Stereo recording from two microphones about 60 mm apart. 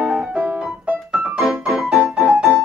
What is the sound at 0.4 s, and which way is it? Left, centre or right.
Piano, right.